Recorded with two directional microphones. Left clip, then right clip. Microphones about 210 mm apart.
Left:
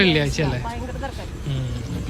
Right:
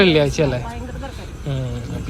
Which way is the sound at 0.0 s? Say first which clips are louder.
Right 4 dB; 5° left (ahead or behind).